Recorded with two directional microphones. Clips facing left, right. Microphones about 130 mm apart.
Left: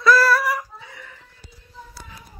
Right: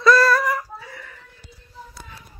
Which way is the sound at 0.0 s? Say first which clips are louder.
Right 1 dB; 5° left (ahead or behind).